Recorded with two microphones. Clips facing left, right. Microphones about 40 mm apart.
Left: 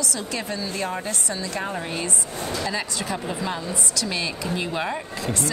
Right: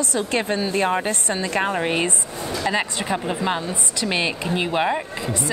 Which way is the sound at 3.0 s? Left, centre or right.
Right.